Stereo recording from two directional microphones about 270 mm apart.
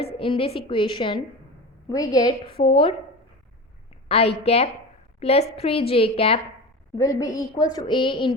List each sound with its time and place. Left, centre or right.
0.0 s a woman's voice: left
4.1 s a woman's voice: left